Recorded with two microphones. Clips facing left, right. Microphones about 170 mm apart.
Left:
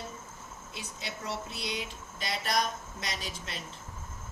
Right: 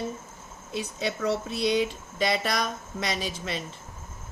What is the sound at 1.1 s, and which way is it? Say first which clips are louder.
Speech: right 10 dB; 75° right (ahead or behind).